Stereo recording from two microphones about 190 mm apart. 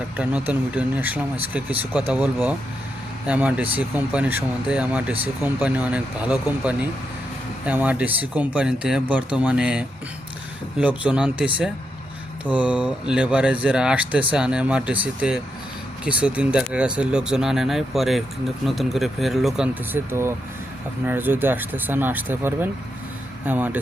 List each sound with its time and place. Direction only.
0.2 s speech: 5° right (ahead or behind)